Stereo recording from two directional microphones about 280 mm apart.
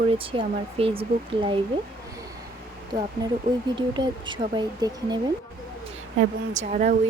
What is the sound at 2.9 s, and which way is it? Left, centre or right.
Speech, centre.